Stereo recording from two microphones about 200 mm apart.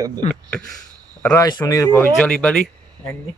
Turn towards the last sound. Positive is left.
turn(degrees=10)  # may be behind; listen again after turning